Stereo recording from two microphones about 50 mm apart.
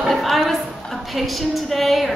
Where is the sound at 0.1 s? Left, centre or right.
Centre.